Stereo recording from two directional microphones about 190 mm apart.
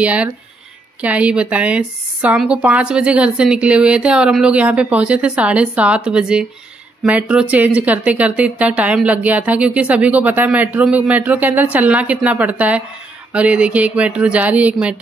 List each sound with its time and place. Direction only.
0.0 s a woman's voice: 5° right (ahead or behind)